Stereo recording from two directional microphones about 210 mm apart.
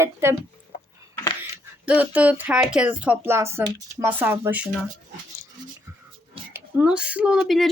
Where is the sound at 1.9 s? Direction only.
5° right (ahead or behind).